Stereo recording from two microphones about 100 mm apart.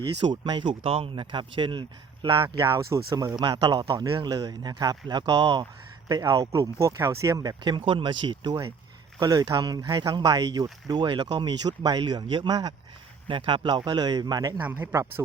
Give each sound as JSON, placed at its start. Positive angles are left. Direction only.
{"t": 0.2, "sound": "speech", "side_deg": -50}
{"t": 0.8, "sound": "speech", "side_deg": -70}
{"t": 2.7, "sound": "speech", "side_deg": -30}
{"t": 3.4, "sound": "speech", "side_deg": -45}
{"t": 13.2, "sound": "speech", "side_deg": -60}
{"t": 14.6, "sound": "speech", "side_deg": -20}